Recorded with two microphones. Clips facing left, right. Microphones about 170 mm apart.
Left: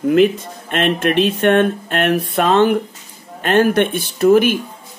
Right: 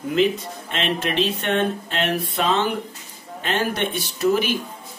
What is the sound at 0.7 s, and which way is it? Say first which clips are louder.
Speech: left 7 dB; 55° left (ahead or behind).